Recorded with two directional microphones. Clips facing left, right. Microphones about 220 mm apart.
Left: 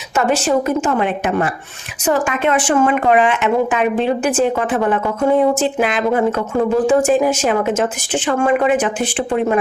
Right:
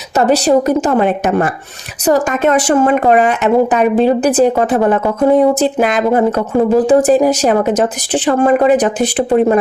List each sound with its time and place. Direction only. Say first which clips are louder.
0.2 s speech: right 5 dB; 35° right (ahead or behind)